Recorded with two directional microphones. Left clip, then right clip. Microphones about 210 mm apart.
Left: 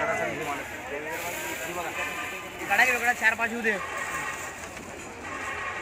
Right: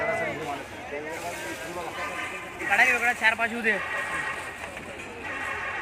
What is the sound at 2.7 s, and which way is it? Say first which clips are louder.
Speech: right 1 dB; 5° left (ahead or behind).